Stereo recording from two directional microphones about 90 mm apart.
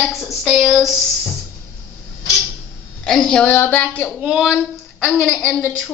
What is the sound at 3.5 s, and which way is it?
Speech, 20° left (ahead or behind).